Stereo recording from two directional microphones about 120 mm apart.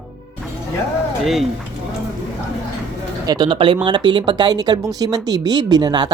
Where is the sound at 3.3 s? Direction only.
40° right (ahead or behind).